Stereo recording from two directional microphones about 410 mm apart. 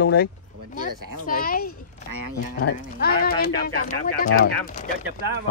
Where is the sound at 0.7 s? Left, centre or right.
Right.